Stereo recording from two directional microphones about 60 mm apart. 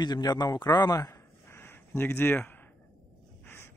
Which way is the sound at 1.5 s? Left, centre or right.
Left.